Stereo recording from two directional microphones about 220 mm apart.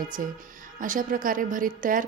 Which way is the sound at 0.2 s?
40° right (ahead or behind).